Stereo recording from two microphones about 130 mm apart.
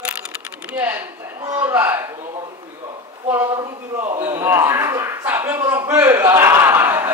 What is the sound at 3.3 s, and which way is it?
A man's voice, 15° right (ahead or behind).